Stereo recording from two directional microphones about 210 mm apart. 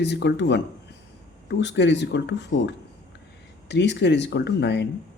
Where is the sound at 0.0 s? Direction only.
55° left (ahead or behind).